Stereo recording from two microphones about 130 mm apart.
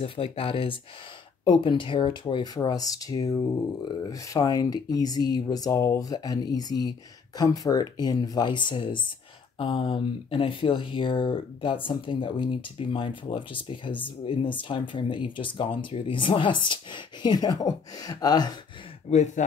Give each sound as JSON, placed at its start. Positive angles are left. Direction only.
{"t": 0.0, "sound": "speech", "side_deg": 45}
{"t": 19.0, "sound": "speech", "side_deg": 65}